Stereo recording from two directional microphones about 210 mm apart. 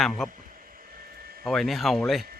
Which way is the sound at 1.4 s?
Centre (ahead or behind).